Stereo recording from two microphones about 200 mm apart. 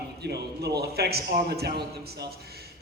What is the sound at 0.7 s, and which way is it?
A man's voice, 55° right (ahead or behind).